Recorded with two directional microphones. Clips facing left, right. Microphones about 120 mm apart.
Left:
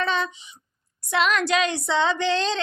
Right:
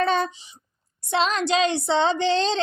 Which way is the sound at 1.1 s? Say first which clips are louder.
Even; 30° right (ahead or behind).